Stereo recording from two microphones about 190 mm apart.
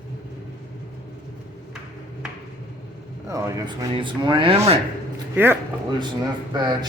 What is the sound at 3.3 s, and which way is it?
Speech, 20° right (ahead or behind).